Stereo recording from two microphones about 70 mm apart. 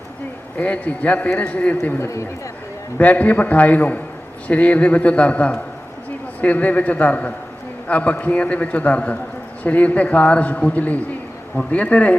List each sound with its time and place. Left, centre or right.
0.6 s a man's voice: left
3.0 s a man's voice: left